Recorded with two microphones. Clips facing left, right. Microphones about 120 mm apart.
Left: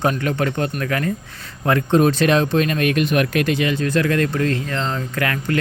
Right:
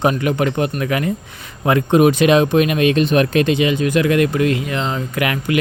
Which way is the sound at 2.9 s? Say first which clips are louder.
Right 4 dB; 30° right (ahead or behind).